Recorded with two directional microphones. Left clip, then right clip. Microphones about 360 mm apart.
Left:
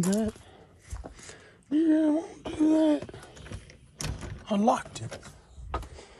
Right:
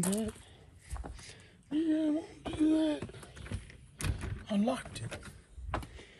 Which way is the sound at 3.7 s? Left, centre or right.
Centre.